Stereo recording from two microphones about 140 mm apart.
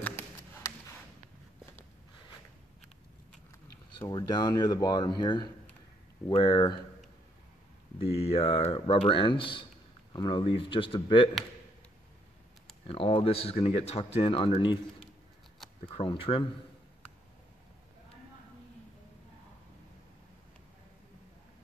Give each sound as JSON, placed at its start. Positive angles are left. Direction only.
{"t": 4.1, "sound": "speech", "side_deg": 30}
{"t": 8.0, "sound": "speech", "side_deg": 45}
{"t": 12.8, "sound": "speech", "side_deg": 40}
{"t": 15.9, "sound": "speech", "side_deg": 40}